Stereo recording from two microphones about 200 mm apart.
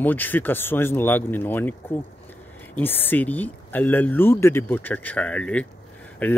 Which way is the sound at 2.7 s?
10° left (ahead or behind).